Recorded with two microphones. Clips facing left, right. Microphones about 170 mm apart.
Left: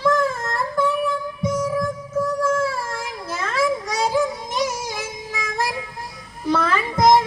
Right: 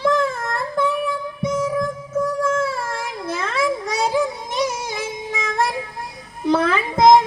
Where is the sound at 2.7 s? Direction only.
60° right (ahead or behind).